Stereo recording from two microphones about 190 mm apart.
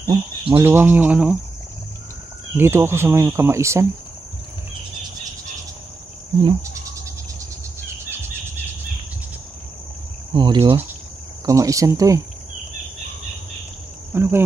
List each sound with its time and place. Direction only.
0.0 s cricket: 20° right (ahead or behind)
0.7 s speech: 10° right (ahead or behind)
2.5 s speech: 15° right (ahead or behind)
10.3 s cricket: 25° right (ahead or behind)
11.4 s speech: 15° right (ahead or behind)
14.1 s speech: 10° right (ahead or behind)